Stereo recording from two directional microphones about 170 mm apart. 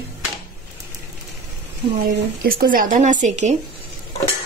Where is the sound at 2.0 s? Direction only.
60° right (ahead or behind); by 3.6 s 45° right (ahead or behind).